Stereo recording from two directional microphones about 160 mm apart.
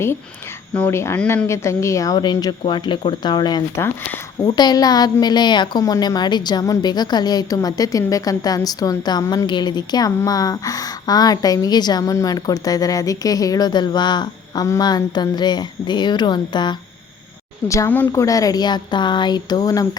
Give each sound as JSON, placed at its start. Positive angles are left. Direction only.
{"t": 0.7, "sound": "a woman's voice", "side_deg": 15}
{"t": 17.7, "sound": "a woman's voice", "side_deg": 15}